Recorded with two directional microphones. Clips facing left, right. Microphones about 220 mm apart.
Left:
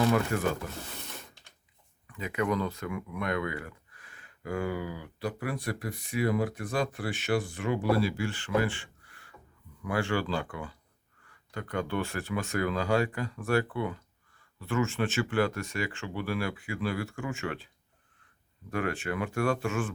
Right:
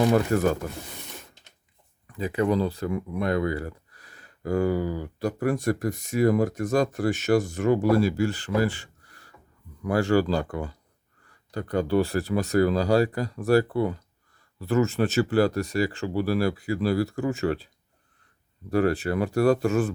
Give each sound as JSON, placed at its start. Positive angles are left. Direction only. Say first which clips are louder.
{"t": 0.0, "sound": "speech", "louder": "right 5 dB", "side_deg": -40}
{"t": 2.0, "sound": "speech", "louder": "right 6 dB", "side_deg": -35}
{"t": 18.7, "sound": "speech", "louder": "right 8 dB", "side_deg": -35}